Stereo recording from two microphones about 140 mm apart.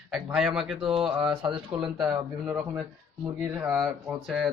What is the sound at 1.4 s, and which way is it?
Speech, 35° right (ahead or behind).